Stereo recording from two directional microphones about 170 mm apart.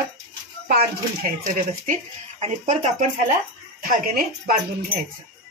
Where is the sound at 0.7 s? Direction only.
60° right (ahead or behind); by 2.9 s 40° right (ahead or behind).